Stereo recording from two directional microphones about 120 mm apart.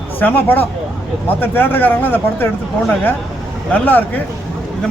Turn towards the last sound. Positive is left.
turn(degrees=15)  # may be behind; listen again after turning